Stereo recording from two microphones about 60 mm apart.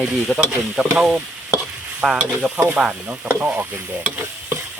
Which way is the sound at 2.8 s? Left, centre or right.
Right.